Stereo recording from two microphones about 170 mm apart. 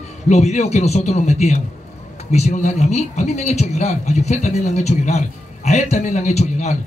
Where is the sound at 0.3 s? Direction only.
40° left (ahead or behind).